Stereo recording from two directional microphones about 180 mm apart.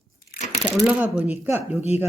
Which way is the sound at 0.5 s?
5° right (ahead or behind).